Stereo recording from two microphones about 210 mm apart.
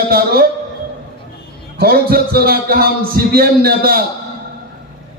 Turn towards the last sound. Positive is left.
turn(degrees=-45)  # may be behind; listen again after turning